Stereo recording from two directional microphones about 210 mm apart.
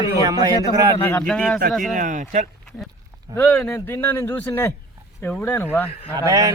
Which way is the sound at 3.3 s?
5° left (ahead or behind).